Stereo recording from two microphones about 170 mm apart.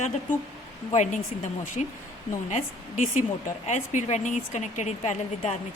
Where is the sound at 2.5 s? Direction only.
45° left (ahead or behind).